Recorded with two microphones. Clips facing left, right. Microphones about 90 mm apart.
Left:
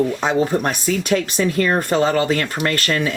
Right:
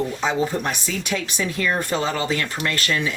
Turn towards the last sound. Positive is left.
turn(degrees=45)  # may be behind; listen again after turning